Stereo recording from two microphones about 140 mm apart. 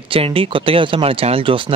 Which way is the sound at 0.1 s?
40° right (ahead or behind).